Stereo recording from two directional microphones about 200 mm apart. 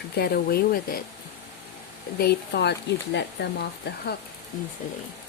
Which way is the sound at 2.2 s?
55° left (ahead or behind).